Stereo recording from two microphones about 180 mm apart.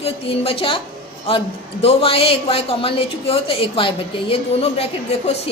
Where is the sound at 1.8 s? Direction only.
35° left (ahead or behind).